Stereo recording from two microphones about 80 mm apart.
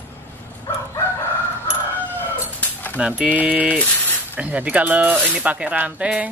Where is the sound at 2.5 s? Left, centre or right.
Centre.